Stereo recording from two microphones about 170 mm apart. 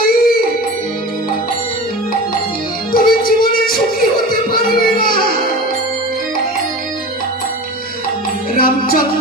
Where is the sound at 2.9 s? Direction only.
60° left (ahead or behind).